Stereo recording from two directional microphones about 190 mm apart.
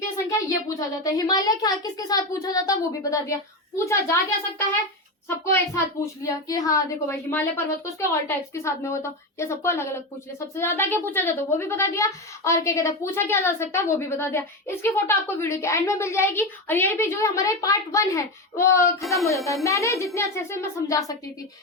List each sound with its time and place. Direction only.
0.0 s a woman's voice: 15° left (ahead or behind)